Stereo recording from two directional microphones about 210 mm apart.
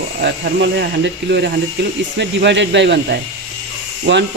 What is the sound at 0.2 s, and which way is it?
Speech, 55° right (ahead or behind).